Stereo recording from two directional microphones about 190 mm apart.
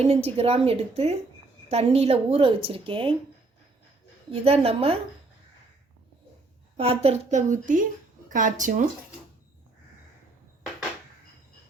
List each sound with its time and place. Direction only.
0.0 s a woman's voice: 35° right (ahead or behind)
4.3 s a woman's voice: 30° right (ahead or behind)
6.7 s a woman's voice: 30° right (ahead or behind)